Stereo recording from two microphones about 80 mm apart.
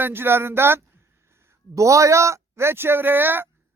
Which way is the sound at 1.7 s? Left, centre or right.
Right.